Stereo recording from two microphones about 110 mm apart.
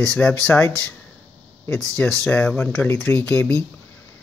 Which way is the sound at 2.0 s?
10° left (ahead or behind).